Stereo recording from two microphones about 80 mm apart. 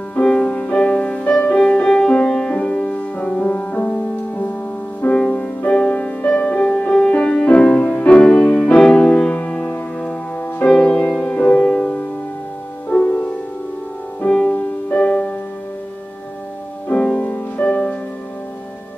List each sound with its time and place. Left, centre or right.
0.2 s music: centre
5.0 s music: centre
13.0 s music: centre
16.9 s music: centre